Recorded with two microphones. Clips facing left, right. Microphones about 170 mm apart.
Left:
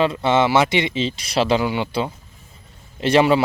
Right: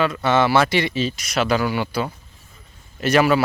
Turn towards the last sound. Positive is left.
turn(degrees=25)  # may be behind; listen again after turning